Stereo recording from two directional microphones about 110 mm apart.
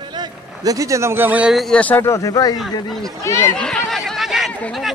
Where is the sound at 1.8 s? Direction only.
20° left (ahead or behind).